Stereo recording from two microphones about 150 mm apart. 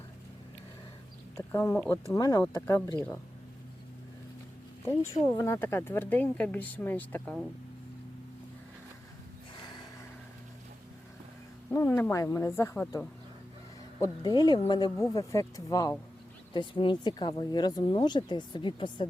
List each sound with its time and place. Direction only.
1.4 s speech: 20° left (ahead or behind)
5.1 s speech: 35° left (ahead or behind)
5.4 s speech: 15° left (ahead or behind)
9.6 s gasp: 30° left (ahead or behind)
11.7 s speech: 15° left (ahead or behind)
14.0 s speech: 25° left (ahead or behind)